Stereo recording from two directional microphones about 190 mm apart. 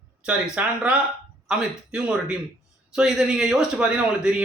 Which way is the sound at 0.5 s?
5° right (ahead or behind).